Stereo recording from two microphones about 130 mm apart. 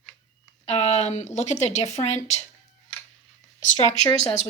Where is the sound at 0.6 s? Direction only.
55° left (ahead or behind).